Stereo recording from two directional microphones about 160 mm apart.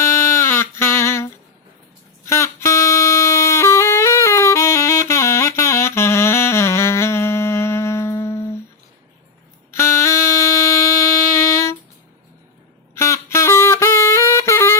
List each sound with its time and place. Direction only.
0.0 s a sound: 15° left (ahead or behind)
2.2 s music: 15° left (ahead or behind)
9.7 s wind instrument: 15° left (ahead or behind)
12.9 s music: 15° left (ahead or behind)